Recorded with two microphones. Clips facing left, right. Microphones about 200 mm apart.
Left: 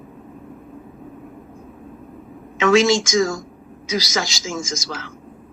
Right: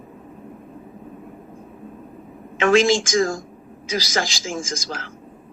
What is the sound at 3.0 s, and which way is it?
A man's voice, 30° right (ahead or behind).